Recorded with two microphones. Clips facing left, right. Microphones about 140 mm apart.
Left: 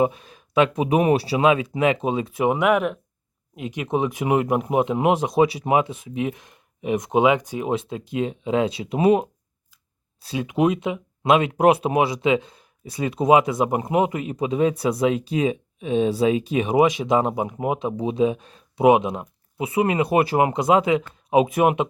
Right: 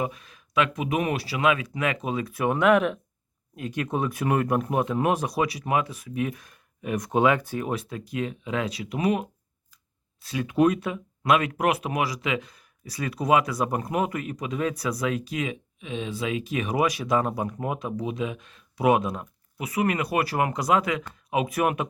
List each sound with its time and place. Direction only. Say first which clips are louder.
0.0 s speech: left 9 dB; 30° left (ahead or behind)
10.4 s speech: left 1 dB; 20° left (ahead or behind); by 18.9 s 35° left (ahead or behind)
18.9 s speech: left 5 dB; 20° left (ahead or behind)